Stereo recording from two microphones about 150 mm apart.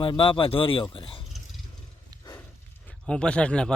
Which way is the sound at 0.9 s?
35° left (ahead or behind).